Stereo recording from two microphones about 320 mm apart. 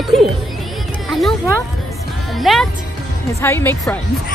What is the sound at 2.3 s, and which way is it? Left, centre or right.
Speech, centre.